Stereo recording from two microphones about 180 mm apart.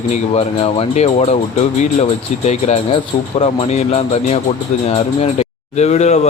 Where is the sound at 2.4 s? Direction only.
35° left (ahead or behind).